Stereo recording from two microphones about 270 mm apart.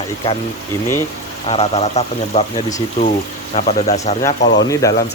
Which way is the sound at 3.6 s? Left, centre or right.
Left.